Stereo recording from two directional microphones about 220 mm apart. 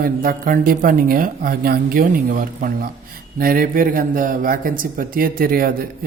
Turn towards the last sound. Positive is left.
turn(degrees=-40)  # may be behind; listen again after turning